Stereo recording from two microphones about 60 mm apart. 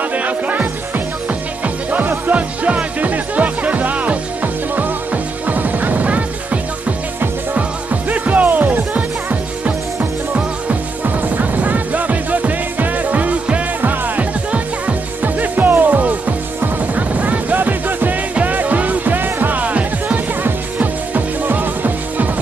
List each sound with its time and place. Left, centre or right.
0.1 s music: right
11.3 s music: right